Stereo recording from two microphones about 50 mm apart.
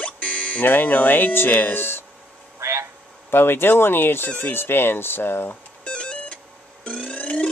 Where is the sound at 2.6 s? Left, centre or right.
Right.